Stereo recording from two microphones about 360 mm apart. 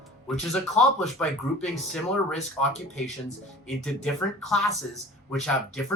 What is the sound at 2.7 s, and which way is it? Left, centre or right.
Speech, centre.